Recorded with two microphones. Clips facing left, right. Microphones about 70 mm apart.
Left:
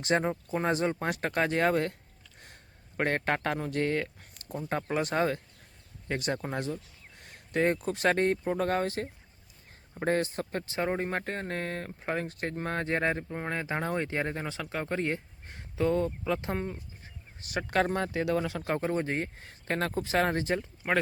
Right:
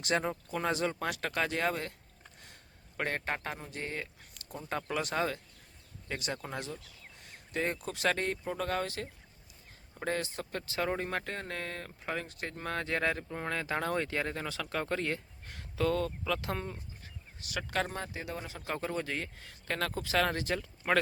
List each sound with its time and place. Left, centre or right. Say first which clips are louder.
0.0 s speech: left 4 dB; left
3.0 s speech: left 6 dB; left
4.7 s speech: left 4 dB; left
7.2 s a sound: left 7 dB; left
7.9 s speech: left 6 dB; left
10.7 s speech: left 2 dB; left
17.4 s speech: left 6 dB; left
18.8 s speech: left 4 dB; left